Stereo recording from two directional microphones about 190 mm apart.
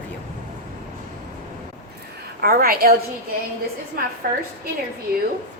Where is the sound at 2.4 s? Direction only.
50° right (ahead or behind).